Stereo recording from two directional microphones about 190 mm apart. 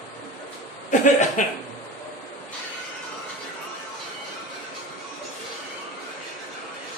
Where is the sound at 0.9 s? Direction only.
40° left (ahead or behind).